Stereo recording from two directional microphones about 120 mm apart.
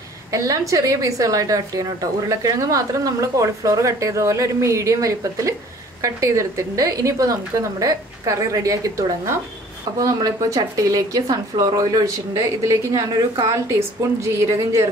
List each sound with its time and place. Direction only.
0.3 s a woman's voice: 30° right (ahead or behind)